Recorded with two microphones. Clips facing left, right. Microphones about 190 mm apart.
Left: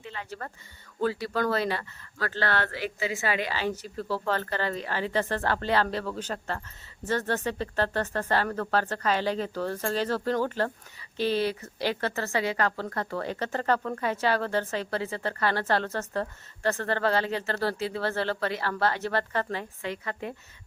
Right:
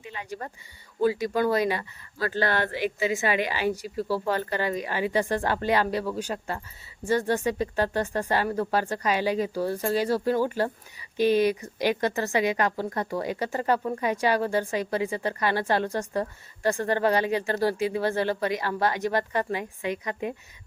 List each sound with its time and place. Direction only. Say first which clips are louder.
0.0 s speech: right 2 dB; 15° right (ahead or behind)